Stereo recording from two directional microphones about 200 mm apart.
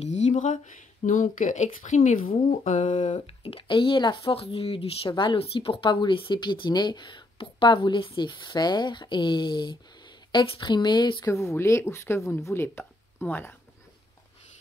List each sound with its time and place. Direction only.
0.0 s speech: 35° left (ahead or behind); by 13.6 s 10° left (ahead or behind)